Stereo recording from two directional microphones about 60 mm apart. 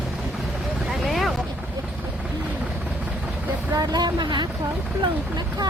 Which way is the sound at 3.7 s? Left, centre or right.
Right.